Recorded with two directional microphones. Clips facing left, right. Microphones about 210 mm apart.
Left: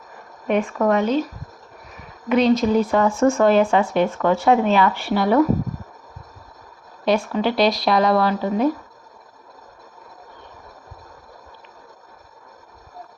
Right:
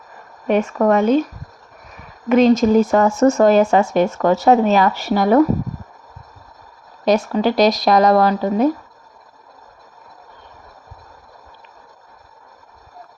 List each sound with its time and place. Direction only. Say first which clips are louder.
0.4 s speech: right 3 dB; 40° right (ahead or behind)
2.3 s speech: right 4 dB; 45° right (ahead or behind)
7.3 s speech: right 4 dB; 40° right (ahead or behind)